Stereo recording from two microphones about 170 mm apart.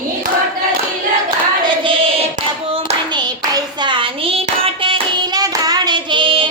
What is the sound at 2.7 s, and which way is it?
Hands, 30° right (ahead or behind).